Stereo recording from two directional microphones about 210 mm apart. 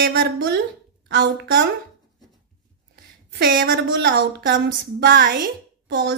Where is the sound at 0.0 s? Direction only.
50° right (ahead or behind).